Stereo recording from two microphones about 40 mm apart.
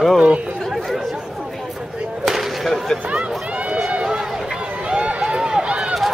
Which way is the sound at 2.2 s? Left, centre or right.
Centre.